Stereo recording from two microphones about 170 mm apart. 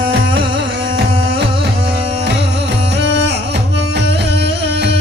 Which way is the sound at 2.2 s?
85° right.